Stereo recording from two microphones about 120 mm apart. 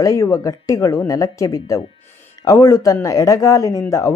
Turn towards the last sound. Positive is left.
turn(degrees=25)  # may be behind; listen again after turning